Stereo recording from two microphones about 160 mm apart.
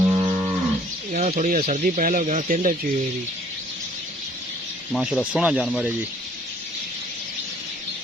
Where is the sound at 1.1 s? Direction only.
50° right (ahead or behind).